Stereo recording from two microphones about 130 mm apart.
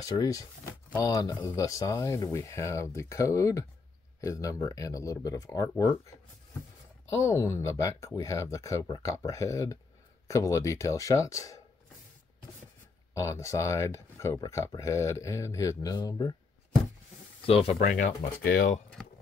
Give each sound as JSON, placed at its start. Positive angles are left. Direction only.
{"t": 0.0, "sound": "speech", "side_deg": 30}
{"t": 7.1, "sound": "speech", "side_deg": 25}
{"t": 13.1, "sound": "speech", "side_deg": 20}
{"t": 17.5, "sound": "speech", "side_deg": 45}
{"t": 17.7, "sound": "speech", "side_deg": 90}